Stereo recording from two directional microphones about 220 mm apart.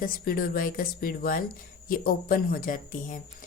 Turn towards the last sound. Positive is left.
turn(degrees=40)  # may be behind; listen again after turning